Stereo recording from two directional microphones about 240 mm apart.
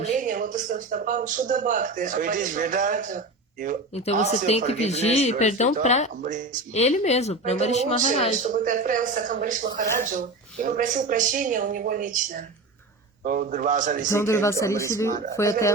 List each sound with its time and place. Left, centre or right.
0.0 s a man's voice: right
3.9 s speech: left
6.2 s a man's voice: right
6.7 s speech: left
8.4 s a man's voice: right
14.1 s speech: centre